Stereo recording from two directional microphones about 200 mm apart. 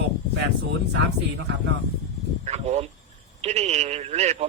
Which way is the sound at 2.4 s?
35° right (ahead or behind).